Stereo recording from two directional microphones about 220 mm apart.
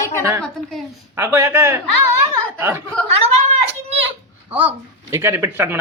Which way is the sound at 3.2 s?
30° right (ahead or behind).